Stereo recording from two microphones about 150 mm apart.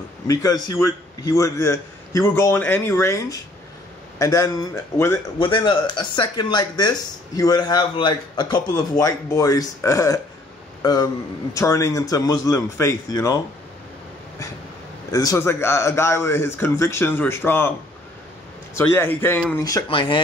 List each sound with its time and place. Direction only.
0.3 s speech: 25° left (ahead or behind)
5.4 s a man's voice: 30° left (ahead or behind)
15.0 s a man's voice: 25° left (ahead or behind)
18.8 s a man's voice: 15° left (ahead or behind)
19.6 s speech: 30° left (ahead or behind)